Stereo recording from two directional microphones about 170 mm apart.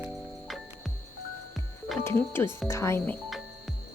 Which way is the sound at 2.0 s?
15° left (ahead or behind).